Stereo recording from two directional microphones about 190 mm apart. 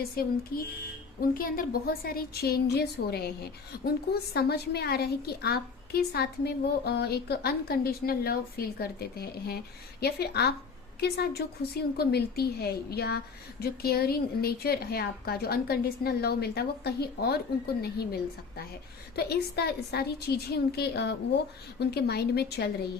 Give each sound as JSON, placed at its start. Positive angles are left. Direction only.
{"t": 0.2, "sound": "a woman's voice", "side_deg": 55}